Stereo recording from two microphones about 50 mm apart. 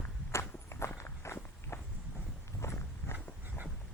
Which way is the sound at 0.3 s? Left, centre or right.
Left.